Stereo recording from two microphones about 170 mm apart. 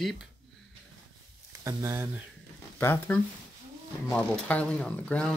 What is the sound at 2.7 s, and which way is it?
Speech, 10° left (ahead or behind).